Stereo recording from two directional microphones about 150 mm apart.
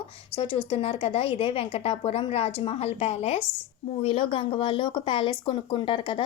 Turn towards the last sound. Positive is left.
turn(degrees=35)  # may be behind; listen again after turning